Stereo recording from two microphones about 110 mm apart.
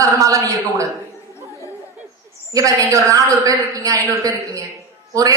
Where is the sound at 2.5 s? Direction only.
30° right (ahead or behind).